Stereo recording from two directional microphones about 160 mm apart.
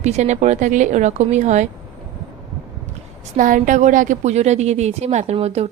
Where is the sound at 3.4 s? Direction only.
55° right (ahead or behind).